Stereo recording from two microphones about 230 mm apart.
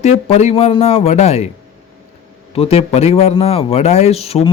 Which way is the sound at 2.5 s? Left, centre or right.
Left.